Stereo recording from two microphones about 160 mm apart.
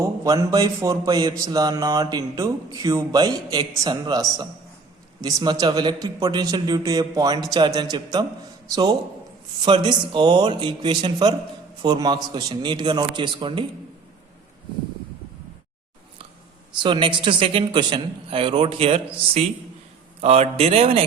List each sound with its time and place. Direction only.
0.0 s speech: 20° right (ahead or behind)
16.7 s a woman's voice: 30° right (ahead or behind)